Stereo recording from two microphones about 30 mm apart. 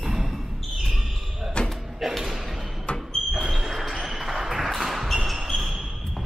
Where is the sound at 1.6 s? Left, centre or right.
Left.